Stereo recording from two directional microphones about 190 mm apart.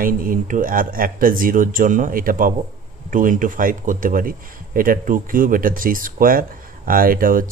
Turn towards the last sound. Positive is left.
turn(degrees=-45)  # may be behind; listen again after turning